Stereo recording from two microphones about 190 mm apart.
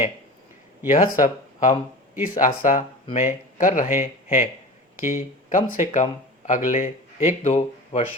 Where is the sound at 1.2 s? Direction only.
35° left (ahead or behind).